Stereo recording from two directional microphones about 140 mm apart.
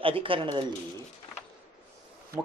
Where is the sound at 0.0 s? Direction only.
40° right (ahead or behind).